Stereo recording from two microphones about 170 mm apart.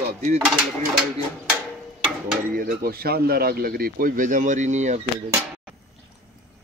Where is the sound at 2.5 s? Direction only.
55° right (ahead or behind).